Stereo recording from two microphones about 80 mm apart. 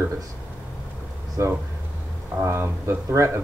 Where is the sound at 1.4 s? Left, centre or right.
Right.